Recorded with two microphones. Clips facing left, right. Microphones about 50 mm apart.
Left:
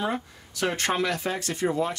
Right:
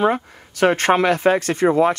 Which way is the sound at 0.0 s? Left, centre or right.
Right.